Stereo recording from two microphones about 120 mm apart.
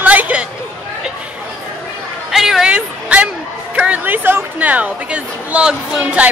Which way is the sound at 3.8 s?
15° right (ahead or behind).